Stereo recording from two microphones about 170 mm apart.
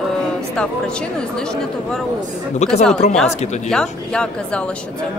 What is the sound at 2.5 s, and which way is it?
Speech, 40° left (ahead or behind).